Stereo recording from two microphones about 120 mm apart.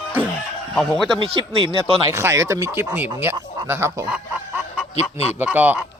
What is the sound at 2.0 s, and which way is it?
Speech, 25° right (ahead or behind).